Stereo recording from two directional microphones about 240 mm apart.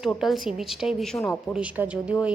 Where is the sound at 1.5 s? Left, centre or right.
Centre.